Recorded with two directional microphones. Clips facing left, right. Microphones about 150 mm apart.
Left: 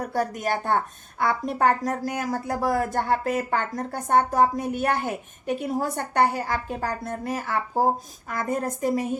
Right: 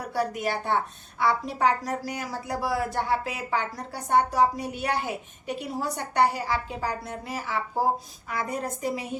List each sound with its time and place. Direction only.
0.0 s a woman's voice: 50° left (ahead or behind)